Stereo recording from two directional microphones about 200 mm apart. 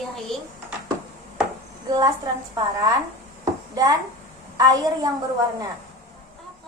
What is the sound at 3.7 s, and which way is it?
A woman's voice, 20° right (ahead or behind).